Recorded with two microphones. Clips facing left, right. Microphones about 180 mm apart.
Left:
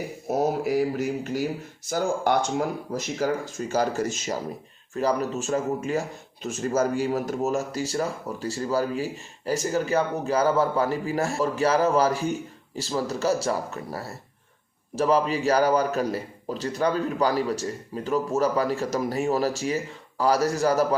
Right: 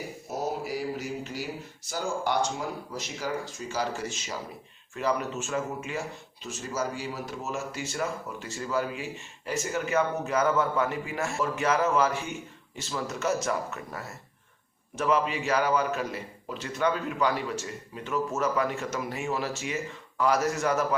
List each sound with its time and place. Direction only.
0.3 s speech: 55° left (ahead or behind); by 20.8 s 35° left (ahead or behind)